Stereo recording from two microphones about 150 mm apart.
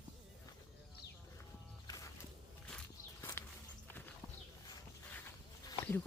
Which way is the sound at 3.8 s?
15° left (ahead or behind).